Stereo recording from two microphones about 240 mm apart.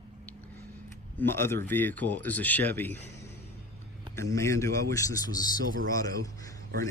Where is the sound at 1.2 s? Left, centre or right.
Centre.